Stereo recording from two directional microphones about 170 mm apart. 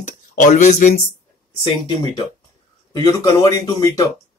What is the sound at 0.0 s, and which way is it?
Speech, 45° left (ahead or behind).